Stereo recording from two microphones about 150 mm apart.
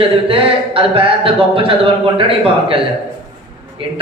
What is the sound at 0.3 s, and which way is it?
Speech, 40° right (ahead or behind).